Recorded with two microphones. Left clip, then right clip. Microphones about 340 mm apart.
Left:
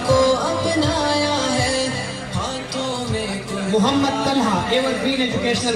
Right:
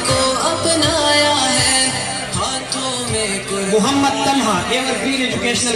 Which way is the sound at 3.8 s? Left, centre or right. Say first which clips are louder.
Right 3 dB; left.